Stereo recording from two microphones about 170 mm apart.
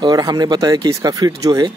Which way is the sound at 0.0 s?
25° right (ahead or behind).